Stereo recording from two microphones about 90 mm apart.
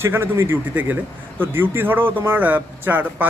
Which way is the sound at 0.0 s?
25° right (ahead or behind).